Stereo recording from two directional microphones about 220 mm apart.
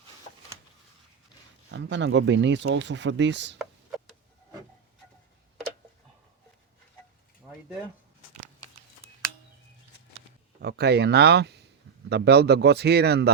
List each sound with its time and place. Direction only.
1.7 s speech: 55° right (ahead or behind)
10.6 s speech: 45° right (ahead or behind)